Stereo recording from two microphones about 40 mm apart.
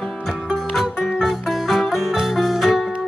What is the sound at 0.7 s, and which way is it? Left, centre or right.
Music, centre.